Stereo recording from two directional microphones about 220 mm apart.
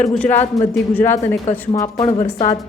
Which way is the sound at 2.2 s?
30° left (ahead or behind).